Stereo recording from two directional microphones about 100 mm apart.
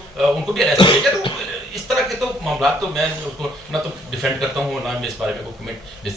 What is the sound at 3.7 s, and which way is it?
A man's voice, centre (ahead or behind).